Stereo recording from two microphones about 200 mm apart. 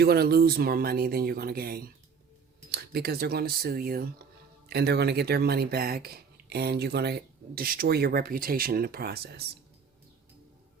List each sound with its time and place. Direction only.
0.0 s speech: 50° right (ahead or behind)